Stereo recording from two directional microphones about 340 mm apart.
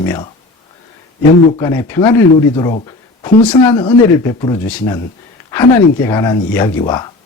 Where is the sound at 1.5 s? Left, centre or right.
Centre.